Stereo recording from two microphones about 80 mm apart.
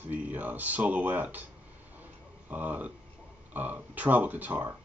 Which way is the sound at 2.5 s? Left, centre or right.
Right.